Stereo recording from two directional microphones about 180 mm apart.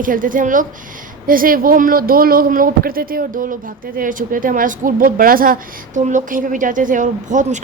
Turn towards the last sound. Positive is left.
turn(degrees=-45)  # may be behind; listen again after turning